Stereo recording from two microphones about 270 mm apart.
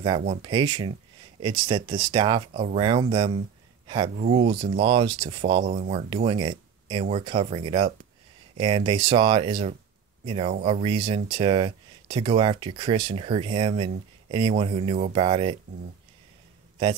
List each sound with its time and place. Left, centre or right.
0.4 s speech: centre
5.6 s speech: right